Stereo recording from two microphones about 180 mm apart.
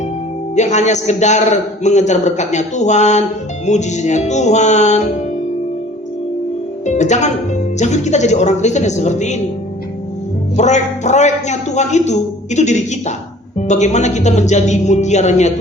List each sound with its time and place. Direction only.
0.5 s a man's voice: 40° left (ahead or behind)
6.8 s a man's voice: 40° left (ahead or behind)
10.6 s a man's voice: 40° left (ahead or behind)